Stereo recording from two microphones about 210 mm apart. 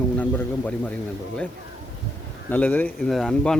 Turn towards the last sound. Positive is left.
turn(degrees=5)  # may be behind; listen again after turning